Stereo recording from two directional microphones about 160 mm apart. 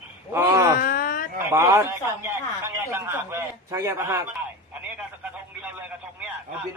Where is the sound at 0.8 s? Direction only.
65° left (ahead or behind).